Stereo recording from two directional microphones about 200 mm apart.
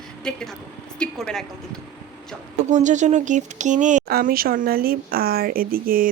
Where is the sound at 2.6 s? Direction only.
35° right (ahead or behind).